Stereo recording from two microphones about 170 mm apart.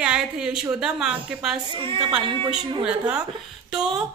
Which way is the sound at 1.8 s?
30° right (ahead or behind).